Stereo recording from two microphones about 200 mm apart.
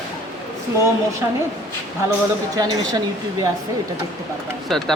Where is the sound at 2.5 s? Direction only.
20° right (ahead or behind).